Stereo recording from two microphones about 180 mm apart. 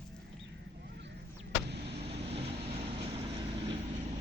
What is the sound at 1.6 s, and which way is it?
Vehicle, 70° right (ahead or behind).